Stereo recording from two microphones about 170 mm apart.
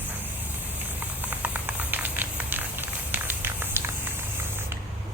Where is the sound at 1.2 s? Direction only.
10° right (ahead or behind).